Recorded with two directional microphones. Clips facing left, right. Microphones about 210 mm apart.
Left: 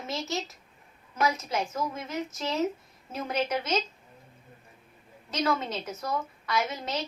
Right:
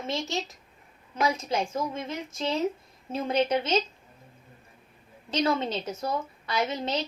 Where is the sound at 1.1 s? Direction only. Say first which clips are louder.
Right 1 dB; 30° right (ahead or behind).